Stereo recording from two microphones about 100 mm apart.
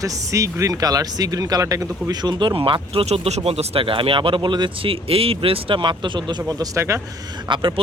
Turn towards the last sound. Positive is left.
turn(degrees=-55)  # may be behind; listen again after turning